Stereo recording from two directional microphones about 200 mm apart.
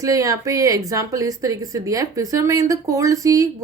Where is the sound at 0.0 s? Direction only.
15° right (ahead or behind).